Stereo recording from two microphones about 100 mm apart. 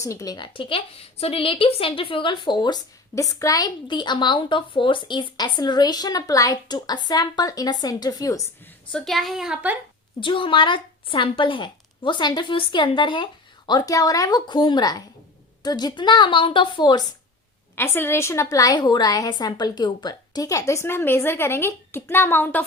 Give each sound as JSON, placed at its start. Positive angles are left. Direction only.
{"t": 0.0, "sound": "speech", "side_deg": 30}
{"t": 0.3, "sound": "speech", "side_deg": 55}
{"t": 3.2, "sound": "speech", "side_deg": 35}
{"t": 3.8, "sound": "speech", "side_deg": 50}
{"t": 8.9, "sound": "a woman's voice", "side_deg": 5}
{"t": 10.2, "sound": "speech", "side_deg": 55}
{"t": 13.7, "sound": "speech", "side_deg": 35}
{"t": 17.7, "sound": "a woman's voice", "side_deg": 20}